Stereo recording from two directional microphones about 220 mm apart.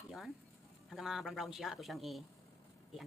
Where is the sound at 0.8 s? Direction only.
Centre (ahead or behind).